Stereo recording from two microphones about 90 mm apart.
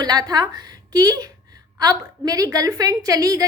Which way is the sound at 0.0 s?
45° right (ahead or behind).